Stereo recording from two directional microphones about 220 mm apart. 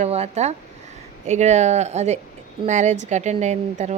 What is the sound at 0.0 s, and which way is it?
A woman's voice, 30° right (ahead or behind).